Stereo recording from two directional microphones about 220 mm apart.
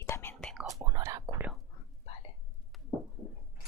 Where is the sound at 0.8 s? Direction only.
15° right (ahead or behind).